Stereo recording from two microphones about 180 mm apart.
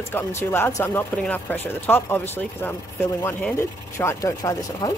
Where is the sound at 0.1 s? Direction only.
15° left (ahead or behind).